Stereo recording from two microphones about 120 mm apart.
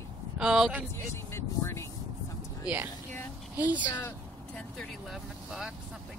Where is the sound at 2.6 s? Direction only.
15° right (ahead or behind).